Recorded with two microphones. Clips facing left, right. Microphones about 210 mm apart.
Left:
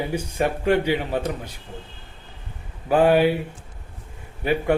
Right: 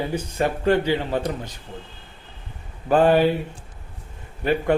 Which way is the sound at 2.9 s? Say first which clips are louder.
Even; 10° left (ahead or behind).